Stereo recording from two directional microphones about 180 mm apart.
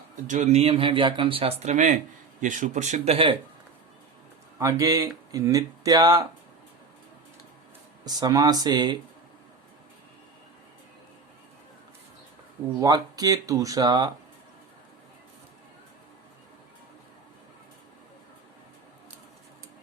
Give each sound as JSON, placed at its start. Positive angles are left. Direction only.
{"t": 0.3, "sound": "speech", "side_deg": -40}
{"t": 4.6, "sound": "speech", "side_deg": -20}
{"t": 8.0, "sound": "speech", "side_deg": -20}
{"t": 12.8, "sound": "speech", "side_deg": -20}